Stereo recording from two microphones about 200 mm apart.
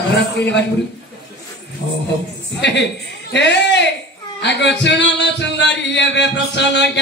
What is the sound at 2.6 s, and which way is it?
A woman's voice, 60° left (ahead or behind).